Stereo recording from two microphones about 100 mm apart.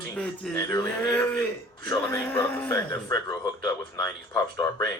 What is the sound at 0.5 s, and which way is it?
Speech, 30° left (ahead or behind).